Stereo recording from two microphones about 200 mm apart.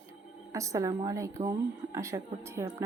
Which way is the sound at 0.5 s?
15° right (ahead or behind).